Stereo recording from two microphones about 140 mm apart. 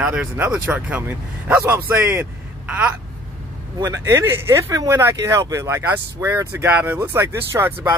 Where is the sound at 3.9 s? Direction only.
20° right (ahead or behind).